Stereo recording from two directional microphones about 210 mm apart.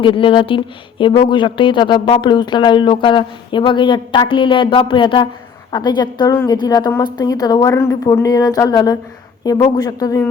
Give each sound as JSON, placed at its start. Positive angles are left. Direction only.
{"t": 0.0, "sound": "a woman's voice", "side_deg": 25}